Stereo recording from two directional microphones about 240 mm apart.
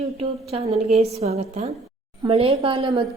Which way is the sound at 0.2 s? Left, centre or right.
Right.